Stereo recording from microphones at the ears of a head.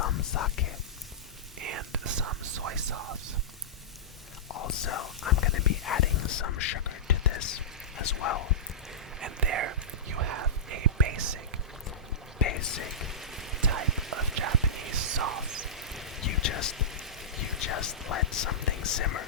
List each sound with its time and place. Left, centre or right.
0.0 s whispering: left
1.5 s whispering: right
4.4 s whispering: left
9.2 s whispering: right
12.4 s whispering: left
12.9 s rain: centre
13.6 s a sound: right
14.1 s whispering: right
15.7 s rain: centre
16.2 s a sound: left